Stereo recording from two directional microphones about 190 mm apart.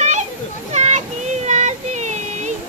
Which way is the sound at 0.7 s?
35° right (ahead or behind).